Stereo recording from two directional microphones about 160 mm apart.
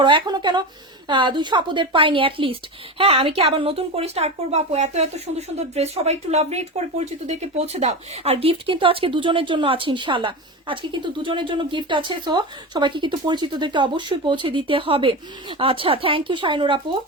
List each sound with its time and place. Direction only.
0.0 s a woman's voice: 30° right (ahead or behind)